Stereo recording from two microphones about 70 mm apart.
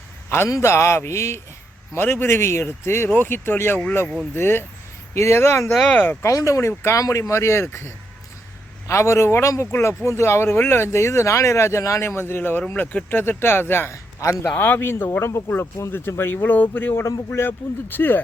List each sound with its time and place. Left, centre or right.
0.3 s a man's voice: left
1.9 s speech: left
5.9 s speech: left
6.2 s speech: left
14.5 s speech: left